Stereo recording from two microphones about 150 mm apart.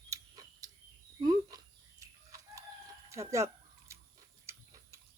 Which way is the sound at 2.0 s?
20° right (ahead or behind).